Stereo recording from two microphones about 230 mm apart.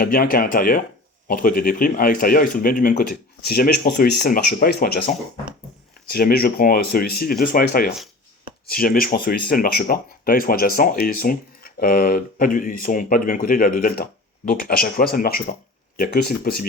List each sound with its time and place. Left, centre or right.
0.0 s speech: left